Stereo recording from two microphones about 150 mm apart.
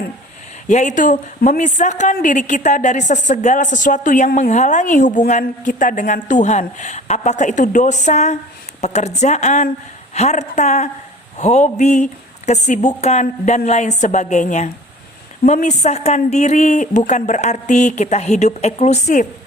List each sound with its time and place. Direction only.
0.7 s a woman's voice: 55° left (ahead or behind)